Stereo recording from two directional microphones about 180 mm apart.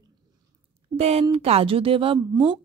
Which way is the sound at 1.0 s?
35° right (ahead or behind).